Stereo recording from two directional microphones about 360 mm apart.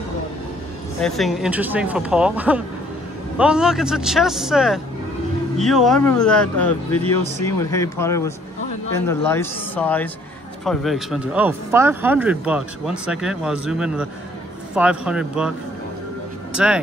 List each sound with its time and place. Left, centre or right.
1.0 s speech: centre
7.0 s speech: centre
7.4 s speech: centre
16.5 s speech: centre